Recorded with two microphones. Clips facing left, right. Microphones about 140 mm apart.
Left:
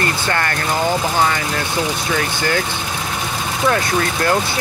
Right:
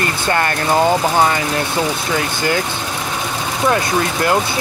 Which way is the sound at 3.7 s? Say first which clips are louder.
Right 1 dB; 25° right (ahead or behind).